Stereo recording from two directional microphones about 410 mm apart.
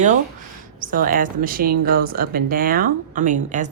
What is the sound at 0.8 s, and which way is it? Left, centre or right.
Speech, centre.